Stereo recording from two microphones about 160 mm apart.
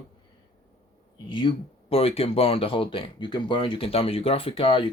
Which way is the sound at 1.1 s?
30° left (ahead or behind).